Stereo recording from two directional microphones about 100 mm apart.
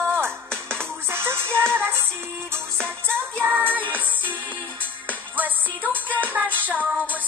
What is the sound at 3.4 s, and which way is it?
Music, 20° right (ahead or behind).